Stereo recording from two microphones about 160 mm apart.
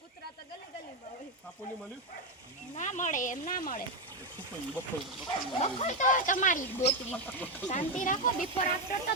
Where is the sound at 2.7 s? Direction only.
50° left (ahead or behind).